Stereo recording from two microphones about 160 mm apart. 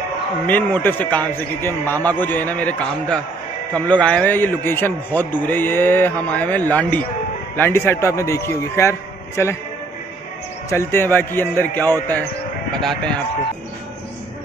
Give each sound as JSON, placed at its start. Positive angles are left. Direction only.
{"t": 0.8, "sound": "a man's voice", "side_deg": 10}
{"t": 10.7, "sound": "a man's voice", "side_deg": 15}